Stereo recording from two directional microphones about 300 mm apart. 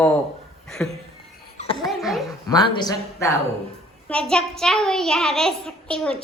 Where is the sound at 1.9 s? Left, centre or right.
Centre.